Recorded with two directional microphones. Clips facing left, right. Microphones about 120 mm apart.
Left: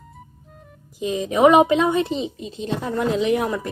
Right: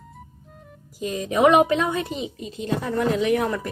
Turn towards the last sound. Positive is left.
turn(degrees=20)  # may be behind; listen again after turning